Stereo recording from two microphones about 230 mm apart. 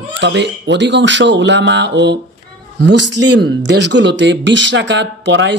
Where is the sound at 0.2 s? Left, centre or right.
Right.